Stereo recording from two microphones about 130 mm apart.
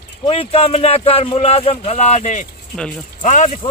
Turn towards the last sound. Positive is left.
turn(degrees=65)  # may be behind; listen again after turning